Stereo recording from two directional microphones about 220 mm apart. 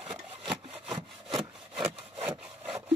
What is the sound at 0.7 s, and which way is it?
Sawing, centre (ahead or behind).